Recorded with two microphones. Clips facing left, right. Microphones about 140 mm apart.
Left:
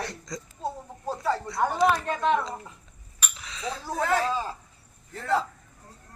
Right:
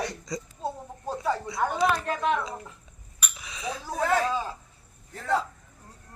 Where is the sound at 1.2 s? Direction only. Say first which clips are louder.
Left 1 dB; 15° right (ahead or behind).